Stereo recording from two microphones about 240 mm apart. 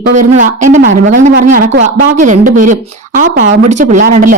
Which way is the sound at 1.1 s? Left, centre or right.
Right.